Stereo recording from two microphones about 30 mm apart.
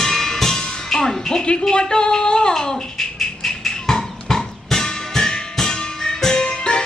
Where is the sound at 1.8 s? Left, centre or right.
Left.